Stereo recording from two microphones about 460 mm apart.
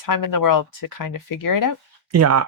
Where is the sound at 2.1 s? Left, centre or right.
Right.